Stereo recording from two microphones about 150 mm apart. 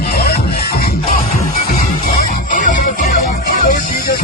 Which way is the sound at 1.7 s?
55° left (ahead or behind).